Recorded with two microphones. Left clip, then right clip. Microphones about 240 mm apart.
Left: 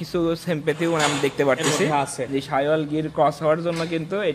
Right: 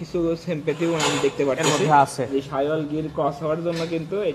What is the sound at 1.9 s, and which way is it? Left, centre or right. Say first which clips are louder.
Speech: right 6 dB; centre.